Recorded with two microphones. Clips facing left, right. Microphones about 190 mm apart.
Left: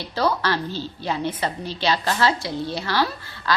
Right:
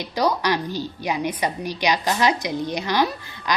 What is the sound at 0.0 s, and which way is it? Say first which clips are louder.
A woman's voice: right 1 dB; 15° right (ahead or behind).